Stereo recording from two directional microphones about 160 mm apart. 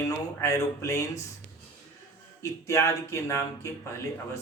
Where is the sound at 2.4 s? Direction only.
20° left (ahead or behind).